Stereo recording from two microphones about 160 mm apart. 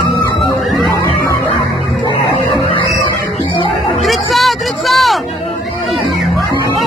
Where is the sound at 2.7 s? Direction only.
30° left (ahead or behind).